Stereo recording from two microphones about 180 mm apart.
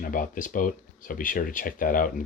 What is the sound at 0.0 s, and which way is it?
Speech, 50° left (ahead or behind).